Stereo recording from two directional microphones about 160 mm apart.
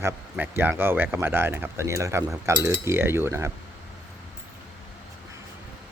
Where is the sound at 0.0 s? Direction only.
15° right (ahead or behind).